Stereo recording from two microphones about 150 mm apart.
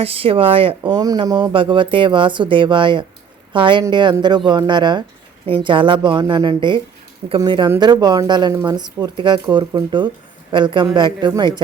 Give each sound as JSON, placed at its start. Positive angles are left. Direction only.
{"t": 0.0, "sound": "speech", "side_deg": -40}